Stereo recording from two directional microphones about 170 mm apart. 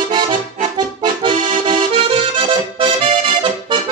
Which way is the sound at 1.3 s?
45° right (ahead or behind).